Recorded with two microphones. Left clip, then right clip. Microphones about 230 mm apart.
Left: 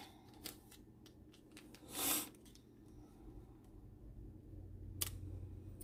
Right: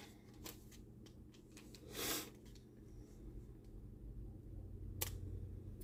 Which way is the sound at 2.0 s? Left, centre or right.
Left.